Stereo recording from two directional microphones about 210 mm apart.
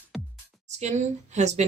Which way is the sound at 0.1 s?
Centre (ahead or behind).